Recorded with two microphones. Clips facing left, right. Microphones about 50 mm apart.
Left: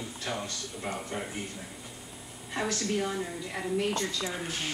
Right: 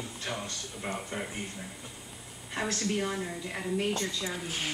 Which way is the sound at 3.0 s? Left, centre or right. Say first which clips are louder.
Left 1 dB; centre.